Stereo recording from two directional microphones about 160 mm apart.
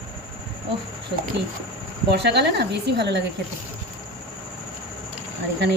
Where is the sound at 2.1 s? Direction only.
90° right.